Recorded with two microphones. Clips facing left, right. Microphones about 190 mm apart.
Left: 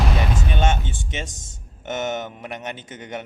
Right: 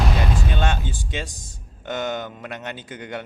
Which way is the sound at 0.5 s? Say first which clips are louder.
Left 2 dB; 20° left (ahead or behind).